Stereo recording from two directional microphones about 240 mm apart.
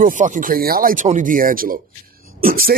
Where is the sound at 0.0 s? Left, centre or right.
Right.